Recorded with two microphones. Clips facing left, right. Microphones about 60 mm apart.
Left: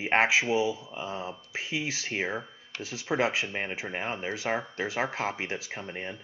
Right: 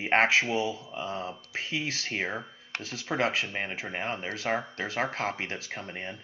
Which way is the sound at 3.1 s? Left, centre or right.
Centre.